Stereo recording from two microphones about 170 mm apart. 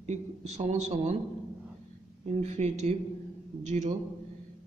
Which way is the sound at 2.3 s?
40° right (ahead or behind).